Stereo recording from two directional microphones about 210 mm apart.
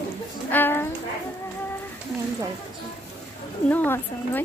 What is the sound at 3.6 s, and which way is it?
Speech, 10° left (ahead or behind).